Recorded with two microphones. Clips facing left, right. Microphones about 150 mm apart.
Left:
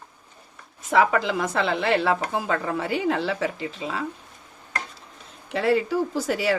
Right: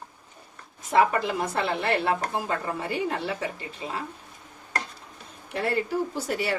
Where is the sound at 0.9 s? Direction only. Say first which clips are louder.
Left 2 dB; 90° left.